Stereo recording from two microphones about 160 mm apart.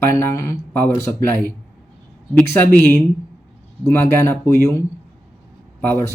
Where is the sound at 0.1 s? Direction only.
15° left (ahead or behind).